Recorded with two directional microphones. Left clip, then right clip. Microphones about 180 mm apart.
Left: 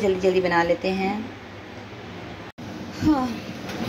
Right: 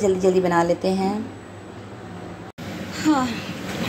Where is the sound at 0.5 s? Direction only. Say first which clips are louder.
Right 1 dB; 20° right (ahead or behind).